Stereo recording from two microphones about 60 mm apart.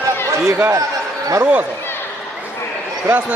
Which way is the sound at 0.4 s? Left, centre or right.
Right.